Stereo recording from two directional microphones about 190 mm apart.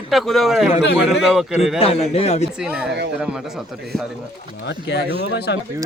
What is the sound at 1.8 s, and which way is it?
Speech, 30° left (ahead or behind).